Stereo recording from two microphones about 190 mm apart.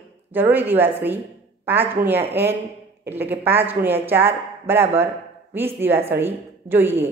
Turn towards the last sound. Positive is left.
turn(degrees=-10)  # may be behind; listen again after turning